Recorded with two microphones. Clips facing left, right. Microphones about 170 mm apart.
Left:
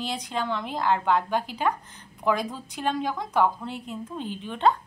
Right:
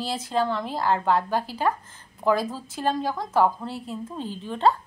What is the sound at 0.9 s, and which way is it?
Speech, 35° right (ahead or behind).